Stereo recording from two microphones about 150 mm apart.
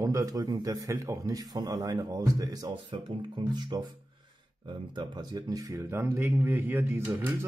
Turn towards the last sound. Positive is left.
turn(degrees=-15)  # may be behind; listen again after turning